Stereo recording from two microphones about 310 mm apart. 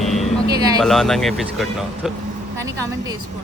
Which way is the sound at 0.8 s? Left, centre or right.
Centre.